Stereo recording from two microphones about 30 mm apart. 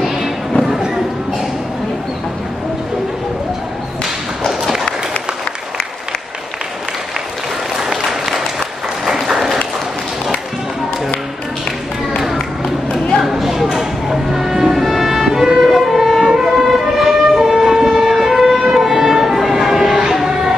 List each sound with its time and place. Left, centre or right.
4.5 s a sound: centre
8.0 s applause: centre
13.2 s music: centre
15.8 s music: centre
16.2 s music: centre
18.8 s vehicle: centre
20.0 s a sound: centre